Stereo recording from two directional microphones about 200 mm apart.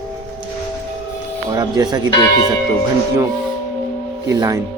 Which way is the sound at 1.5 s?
20° right (ahead or behind).